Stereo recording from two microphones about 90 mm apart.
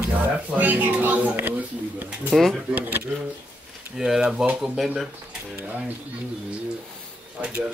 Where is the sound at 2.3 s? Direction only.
Centre (ahead or behind).